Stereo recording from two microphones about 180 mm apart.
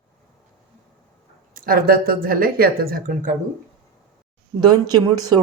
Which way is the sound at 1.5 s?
50° right (ahead or behind).